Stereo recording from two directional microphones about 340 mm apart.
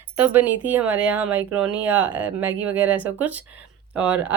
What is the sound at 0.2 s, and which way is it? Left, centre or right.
A woman's voice, centre.